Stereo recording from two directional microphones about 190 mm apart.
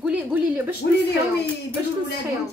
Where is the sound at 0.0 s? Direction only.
10° right (ahead or behind).